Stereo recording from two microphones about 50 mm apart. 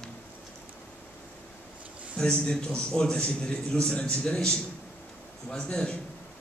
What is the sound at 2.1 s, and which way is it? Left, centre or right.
A man's voice, centre.